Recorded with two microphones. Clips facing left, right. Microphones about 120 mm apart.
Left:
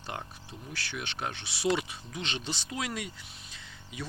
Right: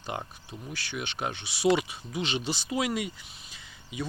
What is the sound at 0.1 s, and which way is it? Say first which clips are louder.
Speech: right 4 dB; 5° right (ahead or behind).